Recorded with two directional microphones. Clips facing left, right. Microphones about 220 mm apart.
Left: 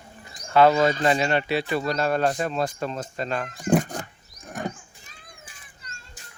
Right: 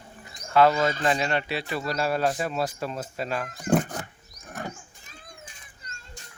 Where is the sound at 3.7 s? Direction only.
10° left (ahead or behind).